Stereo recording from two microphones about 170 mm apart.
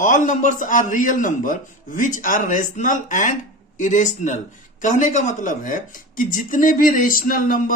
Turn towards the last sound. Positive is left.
turn(degrees=55)  # may be behind; listen again after turning